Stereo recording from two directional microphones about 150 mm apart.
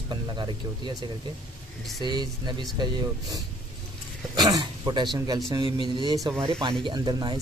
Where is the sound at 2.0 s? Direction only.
30° right (ahead or behind).